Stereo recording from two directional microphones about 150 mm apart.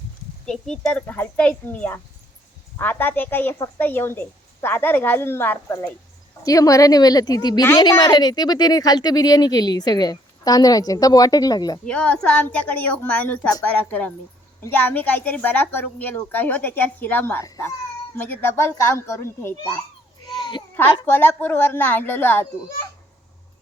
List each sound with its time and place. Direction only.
0.4 s a woman's voice: 5° left (ahead or behind); by 11.8 s 25° left (ahead or behind)
11.9 s a woman's voice: 10° left (ahead or behind)
20.2 s babbling: 30° left (ahead or behind)
21.0 s a woman's voice: 15° left (ahead or behind)